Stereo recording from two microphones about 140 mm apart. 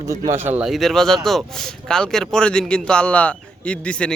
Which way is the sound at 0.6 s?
Centre (ahead or behind).